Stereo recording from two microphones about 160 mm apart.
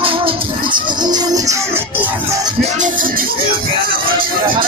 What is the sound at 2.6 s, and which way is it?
Music, 50° right (ahead or behind).